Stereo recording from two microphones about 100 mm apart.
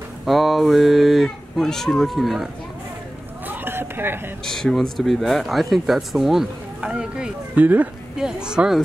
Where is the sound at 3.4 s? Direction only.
20° right (ahead or behind).